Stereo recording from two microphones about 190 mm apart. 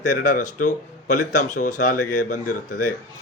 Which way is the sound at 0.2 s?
40° left (ahead or behind).